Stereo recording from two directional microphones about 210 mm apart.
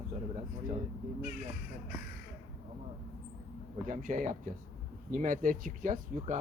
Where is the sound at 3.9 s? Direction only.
40° right (ahead or behind).